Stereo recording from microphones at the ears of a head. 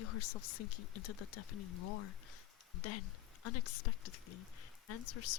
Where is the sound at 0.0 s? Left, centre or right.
Left.